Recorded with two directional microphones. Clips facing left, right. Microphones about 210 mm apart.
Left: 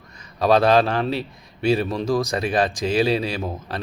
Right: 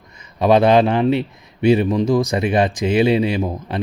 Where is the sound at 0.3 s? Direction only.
20° right (ahead or behind).